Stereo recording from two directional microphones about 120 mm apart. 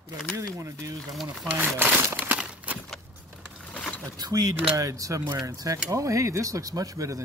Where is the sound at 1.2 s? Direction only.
10° right (ahead or behind).